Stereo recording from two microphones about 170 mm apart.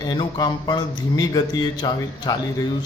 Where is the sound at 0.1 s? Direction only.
25° left (ahead or behind).